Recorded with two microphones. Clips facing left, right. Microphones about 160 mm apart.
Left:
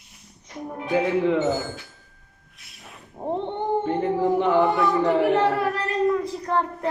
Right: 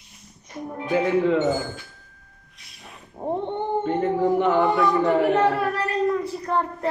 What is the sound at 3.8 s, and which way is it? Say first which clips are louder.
Speech: right 3 dB; 15° left (ahead or behind).